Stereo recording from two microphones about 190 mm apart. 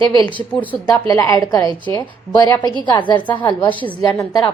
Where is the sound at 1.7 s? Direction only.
25° right (ahead or behind).